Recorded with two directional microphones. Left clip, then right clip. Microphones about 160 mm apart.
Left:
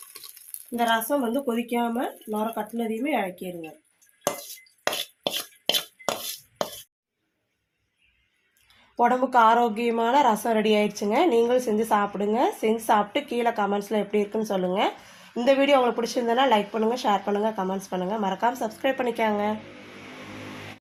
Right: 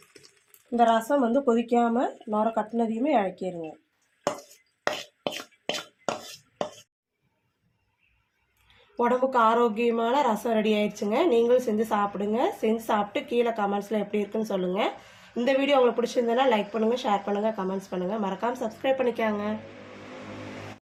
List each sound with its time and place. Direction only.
0.8 s speech: 50° right (ahead or behind)
4.9 s chopping: 5° right (ahead or behind)
9.0 s speech: 30° left (ahead or behind)